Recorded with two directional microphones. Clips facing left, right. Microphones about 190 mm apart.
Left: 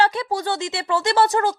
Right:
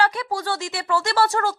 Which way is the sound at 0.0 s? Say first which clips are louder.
Left 2 dB; 25° left (ahead or behind).